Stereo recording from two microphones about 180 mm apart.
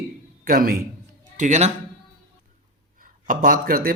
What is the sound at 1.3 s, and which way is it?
Speech, 40° right (ahead or behind).